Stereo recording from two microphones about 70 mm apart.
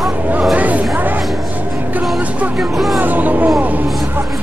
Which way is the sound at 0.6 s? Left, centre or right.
Right.